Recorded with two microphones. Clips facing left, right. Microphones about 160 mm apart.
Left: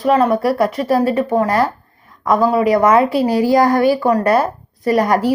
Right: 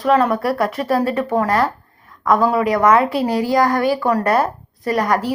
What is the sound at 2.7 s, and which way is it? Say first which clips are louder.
Speech: left 1 dB; 25° left (ahead or behind).